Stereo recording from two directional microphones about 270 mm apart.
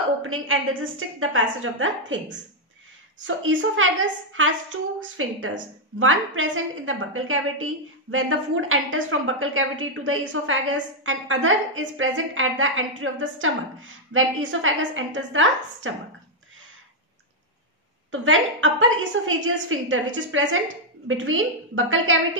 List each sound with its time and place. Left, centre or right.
0.2 s a woman's voice: right
3.3 s a woman's voice: right
18.1 s a woman's voice: right